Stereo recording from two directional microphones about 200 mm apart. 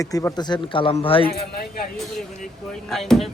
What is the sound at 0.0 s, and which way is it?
Speech, 15° left (ahead or behind).